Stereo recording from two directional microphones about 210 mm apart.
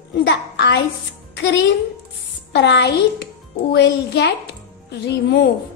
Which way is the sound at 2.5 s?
55° left (ahead or behind).